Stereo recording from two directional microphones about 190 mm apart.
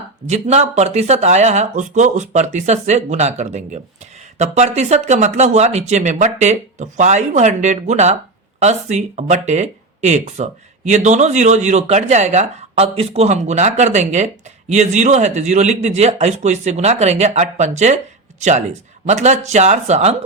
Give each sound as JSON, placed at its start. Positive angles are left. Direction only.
{"t": 0.3, "sound": "speech", "side_deg": -35}